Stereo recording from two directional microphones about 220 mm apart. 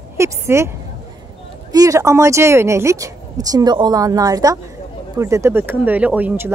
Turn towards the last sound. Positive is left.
turn(degrees=-10)  # may be behind; listen again after turning